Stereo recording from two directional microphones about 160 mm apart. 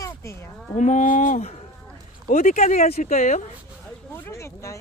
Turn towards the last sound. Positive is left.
turn(degrees=15)  # may be behind; listen again after turning